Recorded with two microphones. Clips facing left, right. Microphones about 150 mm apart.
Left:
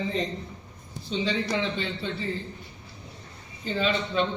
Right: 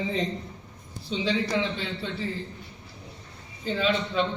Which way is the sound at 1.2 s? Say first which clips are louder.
Right 2 dB; 5° right (ahead or behind).